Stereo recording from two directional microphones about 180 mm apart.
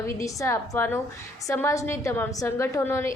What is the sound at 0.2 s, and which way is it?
A woman's voice, 15° left (ahead or behind).